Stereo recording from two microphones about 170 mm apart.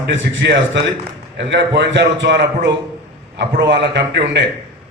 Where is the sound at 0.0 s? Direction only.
90° right.